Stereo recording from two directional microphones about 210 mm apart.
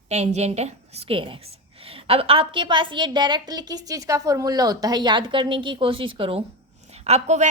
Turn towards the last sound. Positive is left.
turn(degrees=-30)  # may be behind; listen again after turning